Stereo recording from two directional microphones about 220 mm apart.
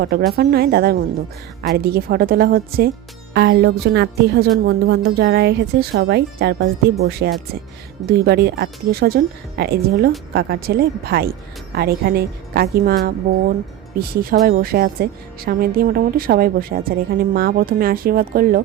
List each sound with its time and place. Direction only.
0.0 s a woman's voice: 45° right (ahead or behind)